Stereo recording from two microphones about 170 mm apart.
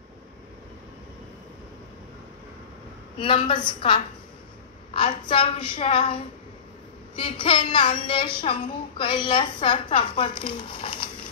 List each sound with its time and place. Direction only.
3.2 s a woman's voice: 30° left (ahead or behind)